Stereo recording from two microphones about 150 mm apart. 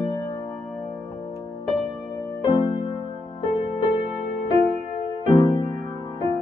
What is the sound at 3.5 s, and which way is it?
Music, 45° left (ahead or behind).